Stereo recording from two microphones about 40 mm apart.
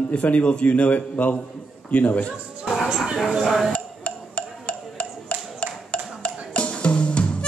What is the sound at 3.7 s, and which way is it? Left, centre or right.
Music, left.